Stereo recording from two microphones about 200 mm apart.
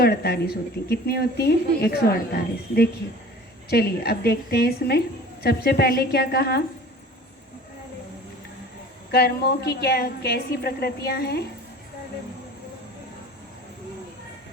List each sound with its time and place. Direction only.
0.0 s a woman's voice: 50° left (ahead or behind)
9.1 s a woman's voice: 50° left (ahead or behind)